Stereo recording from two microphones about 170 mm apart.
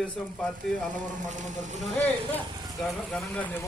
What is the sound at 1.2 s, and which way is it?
Speech, 45° right (ahead or behind).